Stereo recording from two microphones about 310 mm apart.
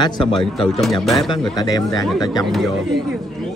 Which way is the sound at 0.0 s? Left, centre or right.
Centre.